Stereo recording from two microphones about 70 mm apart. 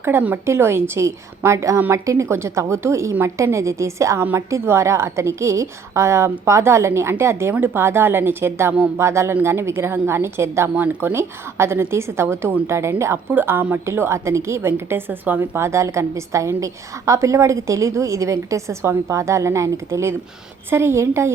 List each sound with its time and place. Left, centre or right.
0.0 s a woman's voice: right